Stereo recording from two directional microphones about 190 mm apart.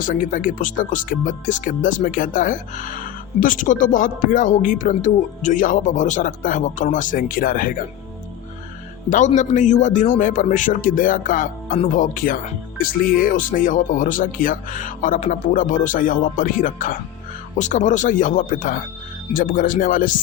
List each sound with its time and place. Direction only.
0.0 s speech: 45° left (ahead or behind)
9.0 s speech: 40° left (ahead or behind)